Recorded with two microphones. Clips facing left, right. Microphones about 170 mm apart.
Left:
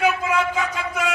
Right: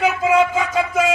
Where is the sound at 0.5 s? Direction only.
90° right.